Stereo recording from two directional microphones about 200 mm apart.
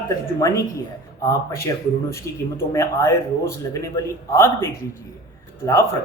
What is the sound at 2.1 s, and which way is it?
Speech, 15° left (ahead or behind).